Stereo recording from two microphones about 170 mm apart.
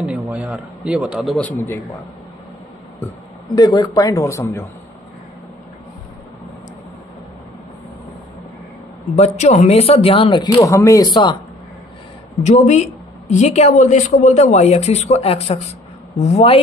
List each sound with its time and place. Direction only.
0.0 s a man's voice: 5° right (ahead or behind)
3.4 s a man's voice: 25° left (ahead or behind)
9.1 s speech: 40° left (ahead or behind); by 11.3 s 25° left (ahead or behind)
12.4 s speech: 40° left (ahead or behind)